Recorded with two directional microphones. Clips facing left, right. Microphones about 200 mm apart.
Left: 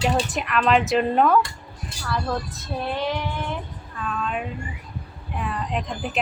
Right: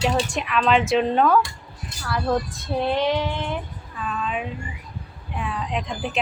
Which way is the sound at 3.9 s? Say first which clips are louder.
Even; centre (ahead or behind).